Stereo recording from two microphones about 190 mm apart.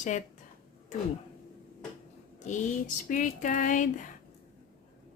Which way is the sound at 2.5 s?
40° left (ahead or behind).